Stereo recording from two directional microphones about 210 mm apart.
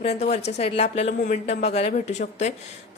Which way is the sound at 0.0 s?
30° left (ahead or behind).